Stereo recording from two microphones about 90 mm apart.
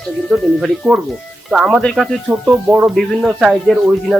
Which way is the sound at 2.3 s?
20° right (ahead or behind).